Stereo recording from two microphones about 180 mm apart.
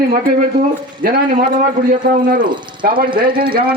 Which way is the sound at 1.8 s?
45° right (ahead or behind).